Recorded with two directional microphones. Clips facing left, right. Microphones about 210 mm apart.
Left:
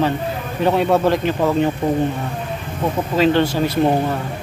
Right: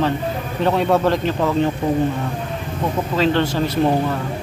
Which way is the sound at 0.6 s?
5° left (ahead or behind).